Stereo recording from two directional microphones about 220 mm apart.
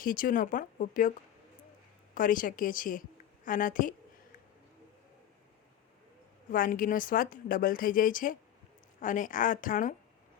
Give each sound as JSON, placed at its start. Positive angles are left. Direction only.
{"t": 0.0, "sound": "a woman's voice", "side_deg": 40}
{"t": 2.1, "sound": "a woman's voice", "side_deg": 40}
{"t": 6.5, "sound": "a woman's voice", "side_deg": 40}